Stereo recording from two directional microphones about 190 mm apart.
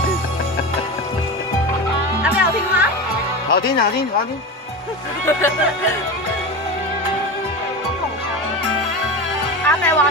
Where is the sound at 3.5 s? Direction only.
55° left (ahead or behind).